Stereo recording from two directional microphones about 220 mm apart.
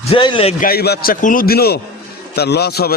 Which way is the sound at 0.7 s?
45° left (ahead or behind).